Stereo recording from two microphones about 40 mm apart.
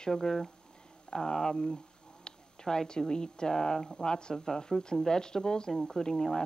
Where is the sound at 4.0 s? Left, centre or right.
Left.